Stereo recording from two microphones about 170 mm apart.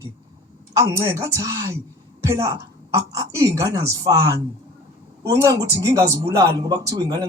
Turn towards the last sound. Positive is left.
turn(degrees=-20)  # may be behind; listen again after turning